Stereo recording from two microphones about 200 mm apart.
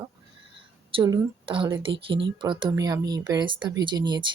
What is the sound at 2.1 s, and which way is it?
Speech, 60° right (ahead or behind).